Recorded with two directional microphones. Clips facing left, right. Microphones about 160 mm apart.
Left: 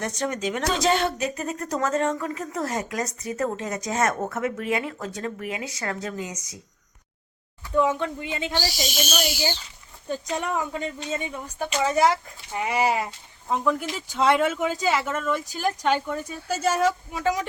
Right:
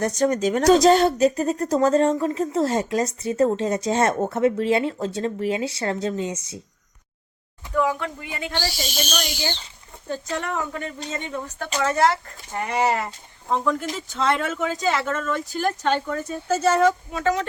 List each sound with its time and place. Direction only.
0.0 s a woman's voice: 40° right (ahead or behind)
7.8 s speech: 25° left (ahead or behind)